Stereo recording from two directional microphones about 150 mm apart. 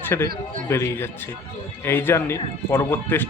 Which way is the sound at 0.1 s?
15° left (ahead or behind).